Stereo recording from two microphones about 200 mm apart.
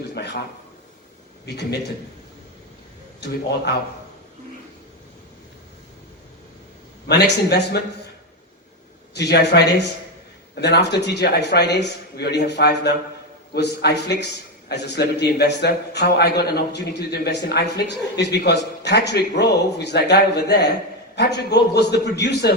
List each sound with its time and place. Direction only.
0.1 s a sound: 55° left (ahead or behind)
1.5 s a man's voice: 55° left (ahead or behind)
3.2 s a man's voice: 55° left (ahead or behind)
7.1 s a man's voice: 55° left (ahead or behind)
9.1 s a man's voice: 55° left (ahead or behind)